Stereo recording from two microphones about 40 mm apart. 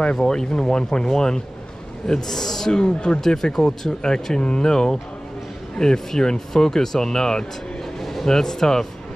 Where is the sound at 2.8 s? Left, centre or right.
Left.